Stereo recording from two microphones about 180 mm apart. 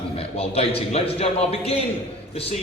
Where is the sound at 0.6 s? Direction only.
35° left (ahead or behind).